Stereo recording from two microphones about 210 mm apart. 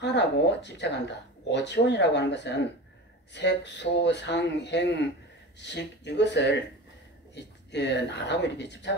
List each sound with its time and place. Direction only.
0.0 s speech: 55° left (ahead or behind)